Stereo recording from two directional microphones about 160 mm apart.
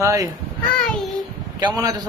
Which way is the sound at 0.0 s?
20° right (ahead or behind).